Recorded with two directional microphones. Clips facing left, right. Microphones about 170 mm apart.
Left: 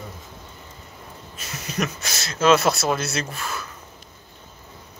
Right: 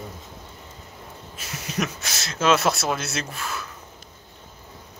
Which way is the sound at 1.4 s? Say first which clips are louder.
Left 1 dB; 5° right (ahead or behind).